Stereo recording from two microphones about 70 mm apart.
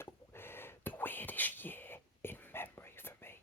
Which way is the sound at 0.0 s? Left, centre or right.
Left.